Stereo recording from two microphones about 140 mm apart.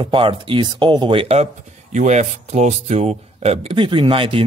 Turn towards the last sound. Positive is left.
turn(degrees=-40)  # may be behind; listen again after turning